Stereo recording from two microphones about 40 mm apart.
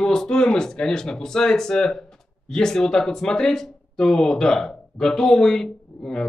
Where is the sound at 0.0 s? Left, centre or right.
Centre.